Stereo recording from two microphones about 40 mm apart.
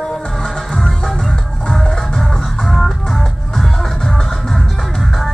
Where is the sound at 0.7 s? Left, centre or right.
Centre.